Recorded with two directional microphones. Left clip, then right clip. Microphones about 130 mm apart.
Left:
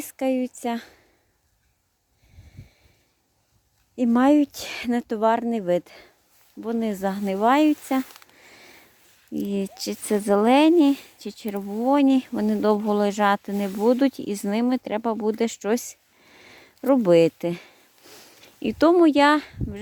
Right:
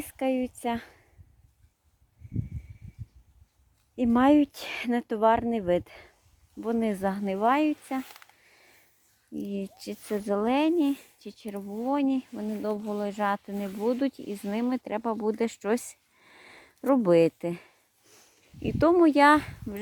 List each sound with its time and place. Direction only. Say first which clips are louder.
0.0 s a woman's voice: left 4 dB; 25° left (ahead or behind)
3.9 s speech: left 3 dB; 20° left (ahead or behind)
6.6 s speech: left 2 dB; 5° left (ahead or behind)
7.3 s speech: left 5 dB; 35° left (ahead or behind)
7.5 s speech: left 6 dB; 65° left (ahead or behind)
8.4 s a sound: left 10 dB; 65° left (ahead or behind)
9.5 s speech: left 9 dB; 60° left (ahead or behind)
14.5 s speech: left 5 dB; 35° left (ahead or behind)
18.1 s a sound: left 9 dB; 60° left (ahead or behind); by 19.4 s 20° left (ahead or behind)
19.4 s speech: left 2 dB; centre (ahead or behind)